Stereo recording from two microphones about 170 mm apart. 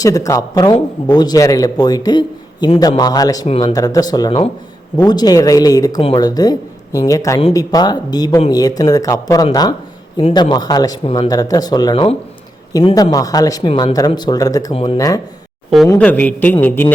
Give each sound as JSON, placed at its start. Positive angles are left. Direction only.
{"t": 0.0, "sound": "a man's voice", "side_deg": 20}
{"t": 11.0, "sound": "speech", "side_deg": 35}
{"t": 11.3, "sound": "a man's voice", "side_deg": 20}
{"t": 14.7, "sound": "speech", "side_deg": 35}
{"t": 14.9, "sound": "a man's voice", "side_deg": 20}
{"t": 16.0, "sound": "a man's voice", "side_deg": 10}